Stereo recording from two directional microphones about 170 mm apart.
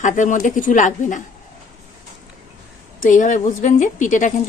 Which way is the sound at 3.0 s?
45° left (ahead or behind).